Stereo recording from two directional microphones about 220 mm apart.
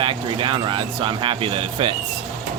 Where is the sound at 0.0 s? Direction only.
25° right (ahead or behind).